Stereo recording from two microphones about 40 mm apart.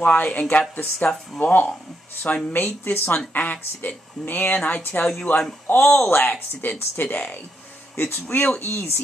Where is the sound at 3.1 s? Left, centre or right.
Left.